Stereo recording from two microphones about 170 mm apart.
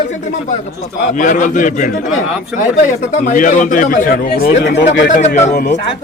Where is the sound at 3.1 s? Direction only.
50° left (ahead or behind); by 4.9 s 85° left.